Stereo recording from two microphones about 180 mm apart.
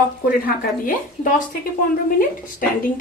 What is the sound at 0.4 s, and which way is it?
Speech, 45° left (ahead or behind).